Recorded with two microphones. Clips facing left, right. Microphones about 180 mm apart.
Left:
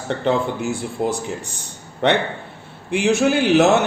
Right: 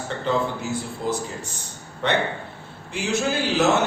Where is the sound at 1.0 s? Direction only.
65° left (ahead or behind).